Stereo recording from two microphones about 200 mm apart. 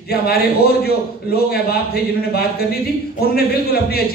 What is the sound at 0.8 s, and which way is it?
A man's voice, 50° left (ahead or behind).